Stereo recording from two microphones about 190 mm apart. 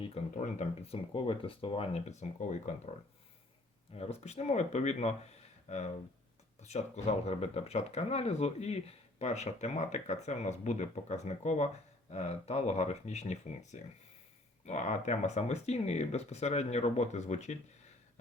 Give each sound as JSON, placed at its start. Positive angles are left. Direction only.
{"t": 0.0, "sound": "speech", "side_deg": 35}
{"t": 3.9, "sound": "speech", "side_deg": 30}